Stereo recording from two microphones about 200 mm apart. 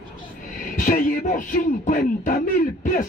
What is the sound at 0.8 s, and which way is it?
Speech, 40° left (ahead or behind).